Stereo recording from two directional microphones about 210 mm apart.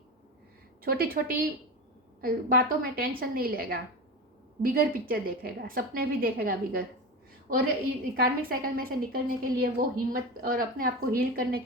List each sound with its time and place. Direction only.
0.8 s a woman's voice: 45° right (ahead or behind)
8.1 s a woman's voice: 45° right (ahead or behind)